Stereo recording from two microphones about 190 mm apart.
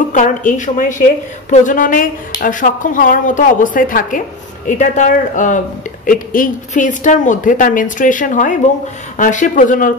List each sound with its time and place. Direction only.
0.1 s a woman's voice: 45° left (ahead or behind)